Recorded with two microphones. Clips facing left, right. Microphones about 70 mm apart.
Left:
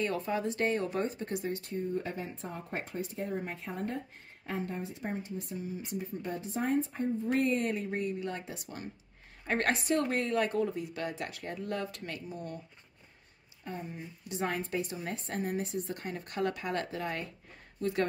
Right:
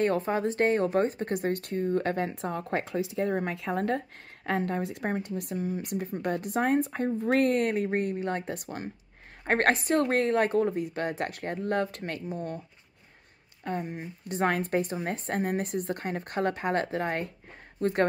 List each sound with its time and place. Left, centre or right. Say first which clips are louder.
0.0 s speech: right 6 dB; right
4.5 s speech: right 8 dB; right
8.6 s speech: right 6 dB; right
13.7 s speech: right 7 dB; right